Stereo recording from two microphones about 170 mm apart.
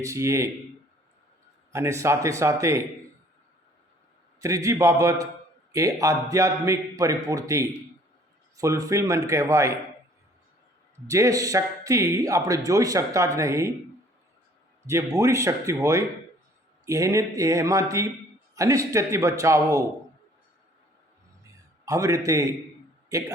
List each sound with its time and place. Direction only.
0.0 s a man's voice: 15° right (ahead or behind)
1.7 s a man's voice: 15° right (ahead or behind)
4.4 s a man's voice: 20° right (ahead or behind)
10.9 s speech: 20° right (ahead or behind)
14.8 s a man's voice: 15° right (ahead or behind)
21.8 s speech: 20° right (ahead or behind)